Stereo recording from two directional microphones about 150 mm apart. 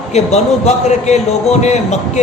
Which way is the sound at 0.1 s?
45° left (ahead or behind).